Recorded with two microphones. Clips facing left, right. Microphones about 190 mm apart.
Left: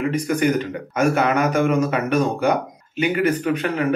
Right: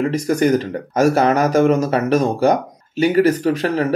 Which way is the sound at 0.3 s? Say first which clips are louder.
Right 5 dB; 35° right (ahead or behind).